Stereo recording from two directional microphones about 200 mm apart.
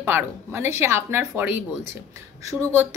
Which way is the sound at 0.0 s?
10° right (ahead or behind).